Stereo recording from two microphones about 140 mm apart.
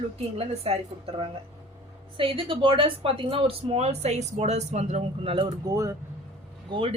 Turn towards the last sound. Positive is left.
turn(degrees=-40)  # may be behind; listen again after turning